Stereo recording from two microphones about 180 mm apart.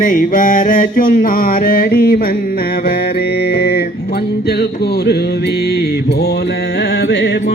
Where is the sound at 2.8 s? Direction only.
55° left (ahead or behind).